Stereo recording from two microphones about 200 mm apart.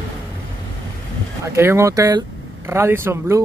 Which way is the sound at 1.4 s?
10° right (ahead or behind).